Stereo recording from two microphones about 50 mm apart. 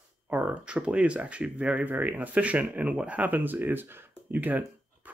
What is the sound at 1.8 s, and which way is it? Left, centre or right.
Speech, right.